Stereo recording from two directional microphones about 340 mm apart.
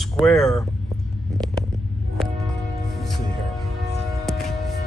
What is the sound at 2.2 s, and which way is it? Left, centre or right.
Music, centre.